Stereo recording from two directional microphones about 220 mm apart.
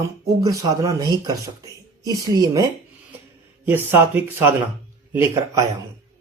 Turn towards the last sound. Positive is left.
turn(degrees=-15)  # may be behind; listen again after turning